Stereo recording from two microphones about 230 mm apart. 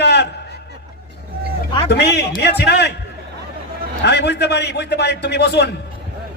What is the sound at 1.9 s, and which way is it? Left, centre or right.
A man's voice, left.